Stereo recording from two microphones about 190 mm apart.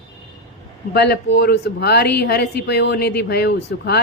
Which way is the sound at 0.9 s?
60° left (ahead or behind).